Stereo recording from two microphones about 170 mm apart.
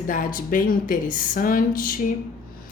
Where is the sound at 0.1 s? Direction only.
50° left (ahead or behind).